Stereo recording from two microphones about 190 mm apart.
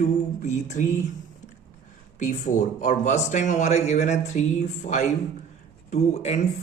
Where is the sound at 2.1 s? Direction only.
40° left (ahead or behind).